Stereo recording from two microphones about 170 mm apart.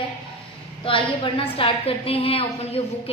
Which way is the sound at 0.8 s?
30° left (ahead or behind).